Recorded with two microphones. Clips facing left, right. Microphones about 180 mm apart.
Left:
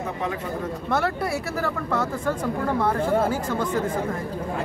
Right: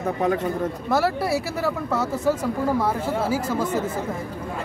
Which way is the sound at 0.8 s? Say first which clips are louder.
Right 2 dB; 5° right (ahead or behind).